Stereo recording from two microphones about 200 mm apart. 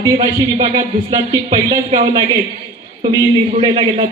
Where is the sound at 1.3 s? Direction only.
20° right (ahead or behind).